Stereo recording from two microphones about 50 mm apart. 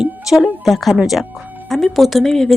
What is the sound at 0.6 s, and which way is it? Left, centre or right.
A woman's voice, centre.